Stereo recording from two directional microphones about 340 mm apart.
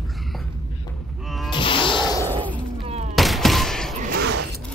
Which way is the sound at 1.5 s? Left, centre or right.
Centre.